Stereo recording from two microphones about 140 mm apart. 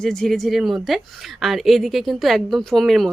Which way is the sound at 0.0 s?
5° left (ahead or behind).